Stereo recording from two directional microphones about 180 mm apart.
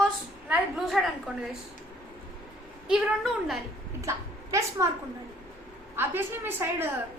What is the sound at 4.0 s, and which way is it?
Speech, 15° right (ahead or behind).